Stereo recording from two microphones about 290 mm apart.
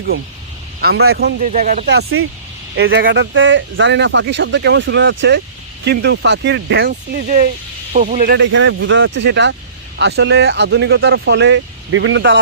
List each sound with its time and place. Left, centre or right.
0.9 s speech: right
1.4 s speech: right